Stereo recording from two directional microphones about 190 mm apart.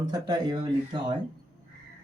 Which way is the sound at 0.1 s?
20° right (ahead or behind).